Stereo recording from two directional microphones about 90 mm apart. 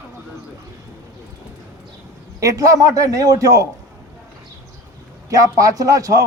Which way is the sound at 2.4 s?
40° right (ahead or behind).